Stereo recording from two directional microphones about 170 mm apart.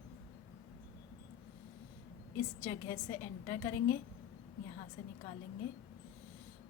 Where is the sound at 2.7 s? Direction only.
15° left (ahead or behind).